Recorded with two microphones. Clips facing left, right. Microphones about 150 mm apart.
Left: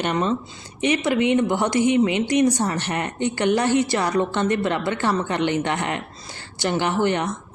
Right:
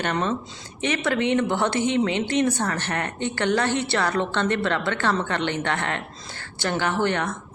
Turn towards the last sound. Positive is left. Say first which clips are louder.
# left 2 dB
turn(degrees=15)  # may be behind; listen again after turning